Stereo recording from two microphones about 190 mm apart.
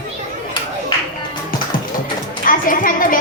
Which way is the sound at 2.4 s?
45° left (ahead or behind).